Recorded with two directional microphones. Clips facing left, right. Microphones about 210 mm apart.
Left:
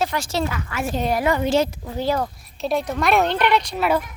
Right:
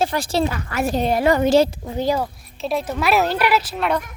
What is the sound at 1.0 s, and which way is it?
Speech, 25° right (ahead or behind).